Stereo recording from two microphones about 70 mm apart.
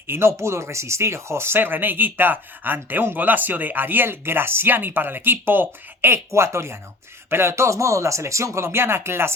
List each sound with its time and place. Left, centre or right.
0.1 s speech: right